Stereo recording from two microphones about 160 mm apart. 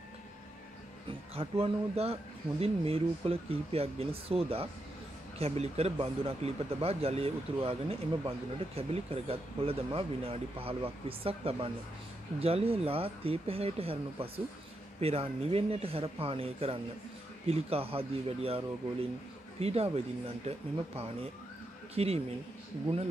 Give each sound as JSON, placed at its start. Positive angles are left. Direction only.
{"t": 1.3, "sound": "speech", "side_deg": -40}